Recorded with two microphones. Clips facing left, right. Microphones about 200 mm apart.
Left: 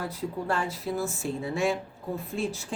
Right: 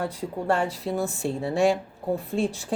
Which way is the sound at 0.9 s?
25° right (ahead or behind).